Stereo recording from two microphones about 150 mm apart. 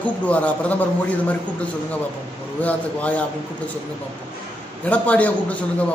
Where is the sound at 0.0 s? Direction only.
10° left (ahead or behind).